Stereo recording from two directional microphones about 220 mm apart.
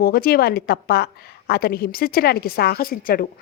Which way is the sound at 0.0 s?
45° left (ahead or behind).